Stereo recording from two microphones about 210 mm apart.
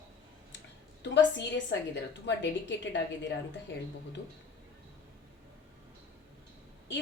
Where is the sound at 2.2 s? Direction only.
55° left (ahead or behind).